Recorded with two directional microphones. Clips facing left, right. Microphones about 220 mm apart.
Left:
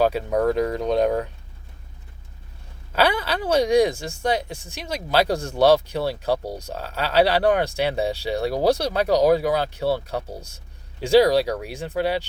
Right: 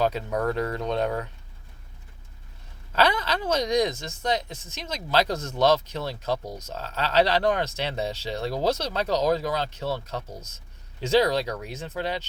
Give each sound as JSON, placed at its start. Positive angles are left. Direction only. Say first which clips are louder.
{"t": 0.0, "sound": "speech", "louder": "left 5 dB", "side_deg": 10}
{"t": 2.9, "sound": "speech", "louder": "left 2 dB", "side_deg": 10}
{"t": 6.4, "sound": "speech", "louder": "left 5 dB", "side_deg": 35}
{"t": 6.7, "sound": "speech", "louder": "even", "side_deg": 10}
{"t": 11.0, "sound": "speech", "louder": "left 6 dB", "side_deg": 10}